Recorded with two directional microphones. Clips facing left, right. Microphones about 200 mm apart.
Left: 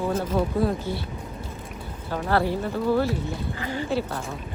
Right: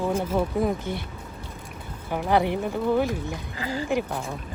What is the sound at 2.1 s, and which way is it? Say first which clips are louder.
Speech: right 1 dB; 15° right (ahead or behind).